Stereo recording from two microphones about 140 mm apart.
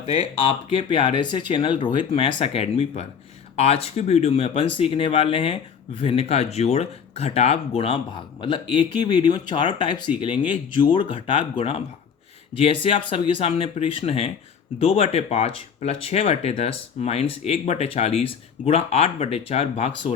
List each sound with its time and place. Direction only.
0.0 s speech: 40° left (ahead or behind)
8.4 s speech: 35° left (ahead or behind)